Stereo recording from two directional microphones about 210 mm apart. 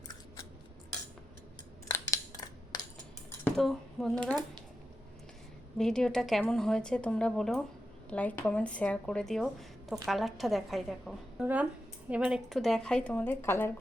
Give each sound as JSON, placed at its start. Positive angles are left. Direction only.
{"t": 1.9, "sound": "scissors", "side_deg": 15}
{"t": 3.4, "sound": "speech", "side_deg": 0}
{"t": 5.7, "sound": "speech", "side_deg": 5}